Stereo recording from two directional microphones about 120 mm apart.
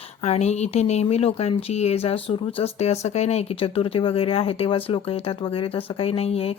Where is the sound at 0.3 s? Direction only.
65° left (ahead or behind).